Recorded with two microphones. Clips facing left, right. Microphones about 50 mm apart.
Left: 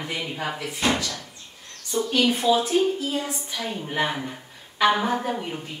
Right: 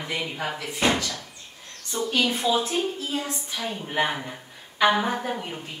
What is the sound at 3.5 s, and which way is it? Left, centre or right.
A woman's voice, centre.